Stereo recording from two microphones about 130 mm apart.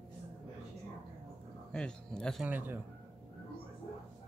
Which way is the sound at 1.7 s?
5° left (ahead or behind).